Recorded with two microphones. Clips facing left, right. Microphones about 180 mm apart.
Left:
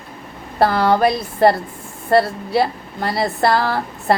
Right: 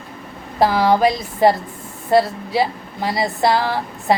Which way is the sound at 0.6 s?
10° right (ahead or behind).